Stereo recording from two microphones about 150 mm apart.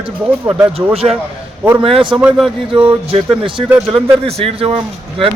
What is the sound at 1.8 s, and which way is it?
Speech, 35° right (ahead or behind).